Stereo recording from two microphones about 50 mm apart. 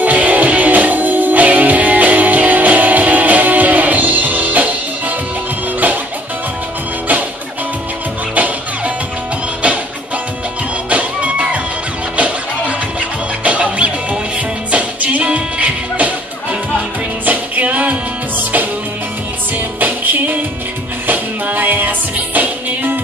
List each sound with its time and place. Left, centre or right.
0.0 s music: right
10.9 s music: right
13.4 s music: right
17.2 s music: right
19.8 s music: right